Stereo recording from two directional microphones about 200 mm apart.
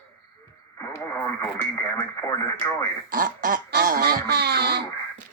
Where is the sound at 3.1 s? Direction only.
45° right (ahead or behind).